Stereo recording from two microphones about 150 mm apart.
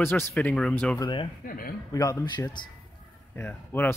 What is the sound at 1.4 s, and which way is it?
Speech, 80° left.